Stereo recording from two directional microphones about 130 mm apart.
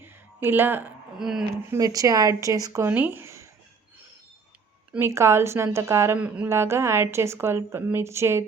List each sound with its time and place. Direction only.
0.0 s a sound: 15° right (ahead or behind)
1.2 s speech: 5° right (ahead or behind)
1.7 s a woman's voice: 25° right (ahead or behind)
2.9 s speech: 15° right (ahead or behind)
4.9 s a woman's voice: 20° right (ahead or behind)
6.1 s speech: 10° right (ahead or behind)
6.5 s a woman's voice: 20° right (ahead or behind)